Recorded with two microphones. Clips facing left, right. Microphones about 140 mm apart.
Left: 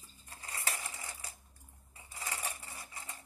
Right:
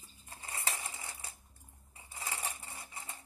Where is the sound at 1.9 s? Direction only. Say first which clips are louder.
Even; 25° right (ahead or behind).